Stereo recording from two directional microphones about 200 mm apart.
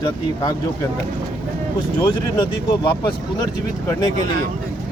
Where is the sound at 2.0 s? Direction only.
20° left (ahead or behind).